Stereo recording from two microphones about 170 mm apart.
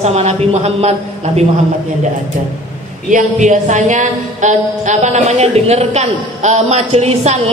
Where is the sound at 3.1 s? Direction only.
45° right (ahead or behind).